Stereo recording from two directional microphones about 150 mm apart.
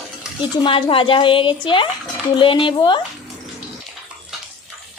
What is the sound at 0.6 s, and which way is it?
A woman's voice, 35° left (ahead or behind).